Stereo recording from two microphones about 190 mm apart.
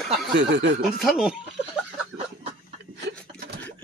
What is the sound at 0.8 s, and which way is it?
Speech, centre (ahead or behind).